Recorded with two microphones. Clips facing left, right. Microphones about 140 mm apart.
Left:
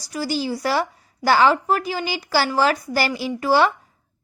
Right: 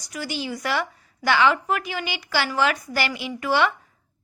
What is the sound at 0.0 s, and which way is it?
A woman's voice, 35° left (ahead or behind).